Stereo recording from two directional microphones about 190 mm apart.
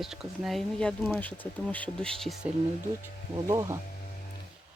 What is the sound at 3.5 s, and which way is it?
Speech, 15° right (ahead or behind).